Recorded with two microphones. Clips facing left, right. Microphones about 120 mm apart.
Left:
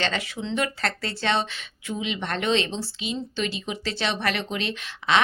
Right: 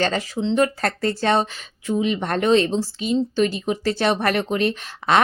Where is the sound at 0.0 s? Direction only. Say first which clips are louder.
Right 6 dB; 40° right (ahead or behind).